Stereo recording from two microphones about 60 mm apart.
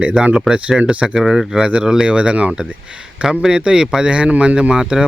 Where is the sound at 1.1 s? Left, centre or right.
Centre.